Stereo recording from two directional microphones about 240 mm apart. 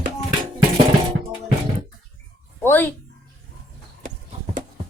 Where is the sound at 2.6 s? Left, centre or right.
Centre.